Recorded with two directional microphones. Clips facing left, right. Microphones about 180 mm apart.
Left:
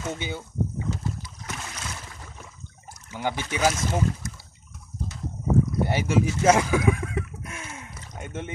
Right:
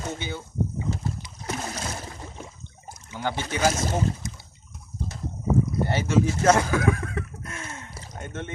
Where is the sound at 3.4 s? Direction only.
40° right (ahead or behind).